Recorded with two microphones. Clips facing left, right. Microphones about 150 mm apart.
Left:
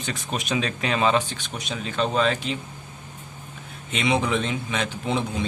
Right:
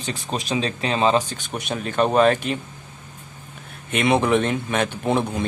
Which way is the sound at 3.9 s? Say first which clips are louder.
Right 5 dB; 55° right (ahead or behind).